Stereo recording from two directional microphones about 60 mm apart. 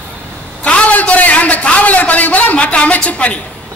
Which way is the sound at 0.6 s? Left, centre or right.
Left.